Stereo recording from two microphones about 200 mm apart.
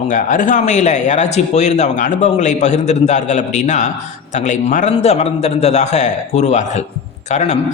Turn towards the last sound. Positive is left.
turn(degrees=35)  # may be behind; listen again after turning